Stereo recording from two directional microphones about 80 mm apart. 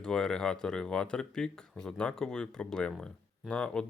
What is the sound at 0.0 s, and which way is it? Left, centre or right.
Speech, centre.